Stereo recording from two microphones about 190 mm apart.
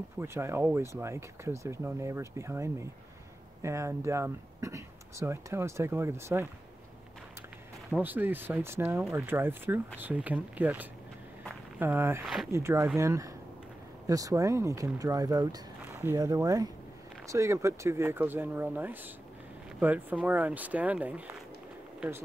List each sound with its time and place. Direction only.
0.2 s speech: 15° right (ahead or behind)
7.9 s speech: 10° right (ahead or behind)